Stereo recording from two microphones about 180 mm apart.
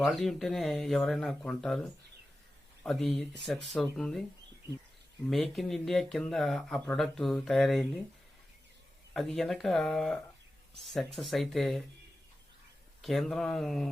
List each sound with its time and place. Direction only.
0.1 s speech: centre (ahead or behind)
5.3 s speech: centre (ahead or behind)
9.1 s speech: centre (ahead or behind)
13.0 s speech: centre (ahead or behind)